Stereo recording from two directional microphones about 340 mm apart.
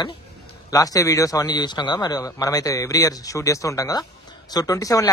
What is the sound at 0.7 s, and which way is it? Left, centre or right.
A man's voice, centre.